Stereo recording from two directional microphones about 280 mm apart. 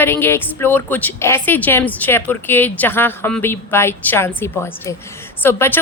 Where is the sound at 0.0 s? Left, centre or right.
Centre.